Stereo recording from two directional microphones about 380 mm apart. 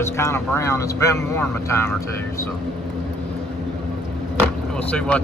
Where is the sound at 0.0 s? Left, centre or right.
Centre.